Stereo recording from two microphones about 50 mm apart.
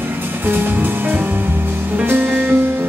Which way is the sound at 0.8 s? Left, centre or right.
Right.